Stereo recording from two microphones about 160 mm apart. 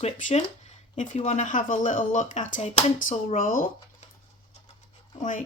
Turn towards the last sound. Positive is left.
turn(degrees=50)  # may be behind; listen again after turning